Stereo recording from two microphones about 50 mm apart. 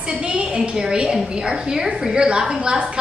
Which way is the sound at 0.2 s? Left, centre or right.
Centre.